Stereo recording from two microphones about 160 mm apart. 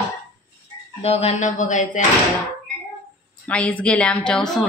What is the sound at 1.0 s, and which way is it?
Speech, 40° left (ahead or behind).